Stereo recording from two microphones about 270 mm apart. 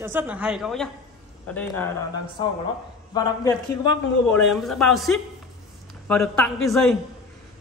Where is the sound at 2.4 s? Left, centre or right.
Centre.